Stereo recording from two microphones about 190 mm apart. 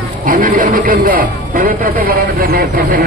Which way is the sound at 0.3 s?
45° right (ahead or behind).